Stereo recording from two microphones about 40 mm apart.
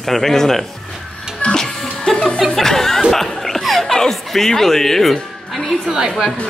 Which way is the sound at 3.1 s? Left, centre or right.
Centre.